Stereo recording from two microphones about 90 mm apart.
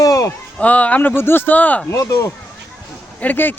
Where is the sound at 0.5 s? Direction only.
15° left (ahead or behind).